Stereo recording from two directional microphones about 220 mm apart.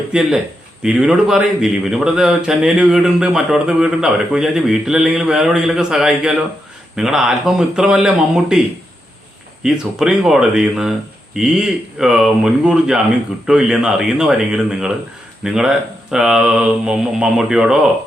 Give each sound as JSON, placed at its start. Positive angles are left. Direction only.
{"t": 0.1, "sound": "a man's voice", "side_deg": 0}
{"t": 9.6, "sound": "speech", "side_deg": 0}